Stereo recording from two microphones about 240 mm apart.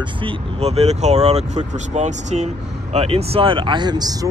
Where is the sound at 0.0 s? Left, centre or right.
Right.